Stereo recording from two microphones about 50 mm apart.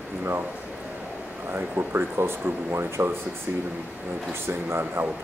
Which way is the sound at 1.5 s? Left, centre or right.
Right.